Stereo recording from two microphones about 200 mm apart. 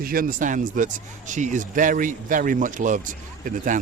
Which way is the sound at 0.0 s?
45° right (ahead or behind).